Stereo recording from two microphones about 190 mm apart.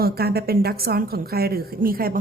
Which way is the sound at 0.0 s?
55° right (ahead or behind).